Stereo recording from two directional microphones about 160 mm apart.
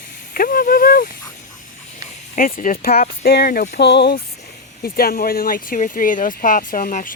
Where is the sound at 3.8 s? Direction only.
90° left.